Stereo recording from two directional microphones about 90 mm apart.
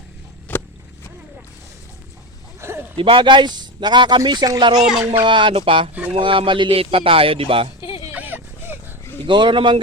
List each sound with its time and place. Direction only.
0.5 s vehicle: 20° left (ahead or behind)
2.6 s a sound: 25° right (ahead or behind)
3.0 s speech: 70° right (ahead or behind)
4.2 s speech: 50° right (ahead or behind)
4.8 s speech: 5° right (ahead or behind)
5.2 s speech: 65° right (ahead or behind); by 5.9 s 85° right
5.9 s speech: 15° right (ahead or behind)
6.1 s speech: 75° right (ahead or behind); by 7.7 s 90° right
7.8 s a sound: 70° left (ahead or behind)
8.1 s a sound: 20° right (ahead or behind)
9.2 s speech: 65° right (ahead or behind)